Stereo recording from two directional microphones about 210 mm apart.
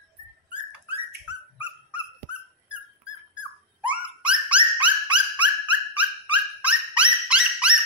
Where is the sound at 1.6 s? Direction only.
5° right (ahead or behind).